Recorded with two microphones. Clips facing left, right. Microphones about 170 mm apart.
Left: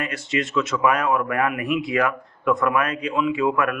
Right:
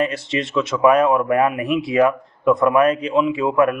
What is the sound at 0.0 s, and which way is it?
A man's voice, 30° right (ahead or behind).